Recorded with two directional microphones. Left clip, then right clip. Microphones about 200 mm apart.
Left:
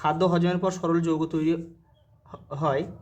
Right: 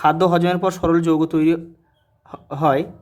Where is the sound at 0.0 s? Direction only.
40° right (ahead or behind).